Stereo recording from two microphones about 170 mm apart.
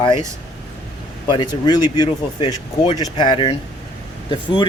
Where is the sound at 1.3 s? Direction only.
25° left (ahead or behind).